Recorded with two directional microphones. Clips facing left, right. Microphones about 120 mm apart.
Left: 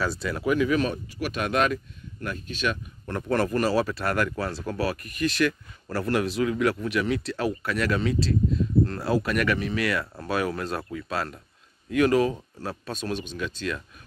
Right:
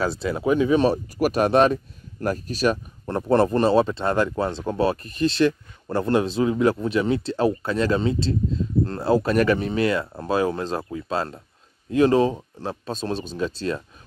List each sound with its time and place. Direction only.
0.0 s speech: 30° right (ahead or behind)